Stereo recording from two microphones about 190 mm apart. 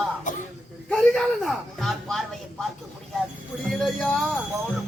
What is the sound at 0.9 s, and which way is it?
Speech, centre (ahead or behind).